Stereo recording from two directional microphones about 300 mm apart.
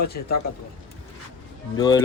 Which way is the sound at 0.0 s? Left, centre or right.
Left.